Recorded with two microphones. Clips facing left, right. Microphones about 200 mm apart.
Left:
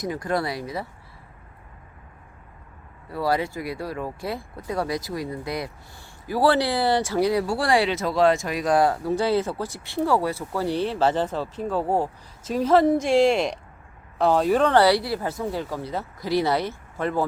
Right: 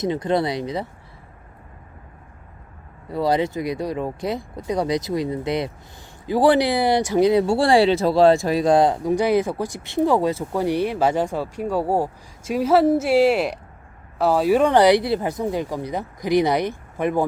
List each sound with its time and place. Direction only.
0.0 s speech: 20° right (ahead or behind)
3.1 s speech: 20° right (ahead or behind)